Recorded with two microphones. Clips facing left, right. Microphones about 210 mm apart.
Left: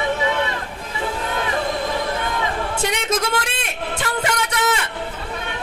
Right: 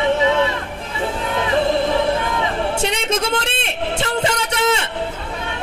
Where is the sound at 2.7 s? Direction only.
25° right (ahead or behind).